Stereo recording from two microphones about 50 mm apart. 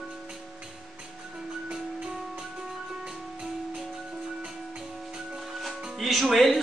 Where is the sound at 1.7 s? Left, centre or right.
Centre.